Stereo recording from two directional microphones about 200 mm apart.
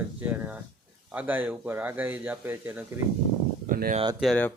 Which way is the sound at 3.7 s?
45° right (ahead or behind).